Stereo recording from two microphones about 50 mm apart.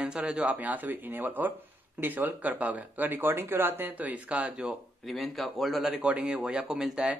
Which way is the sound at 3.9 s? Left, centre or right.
Right.